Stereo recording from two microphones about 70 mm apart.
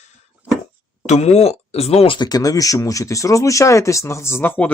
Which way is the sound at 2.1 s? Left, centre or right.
Left.